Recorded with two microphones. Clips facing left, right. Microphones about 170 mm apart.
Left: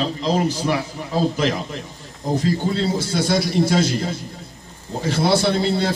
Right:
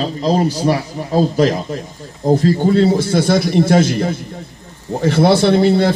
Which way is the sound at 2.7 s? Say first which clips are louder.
Right 9 dB; 55° right (ahead or behind).